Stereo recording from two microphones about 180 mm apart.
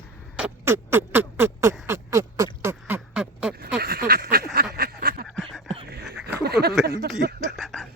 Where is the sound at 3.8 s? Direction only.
60° right (ahead or behind).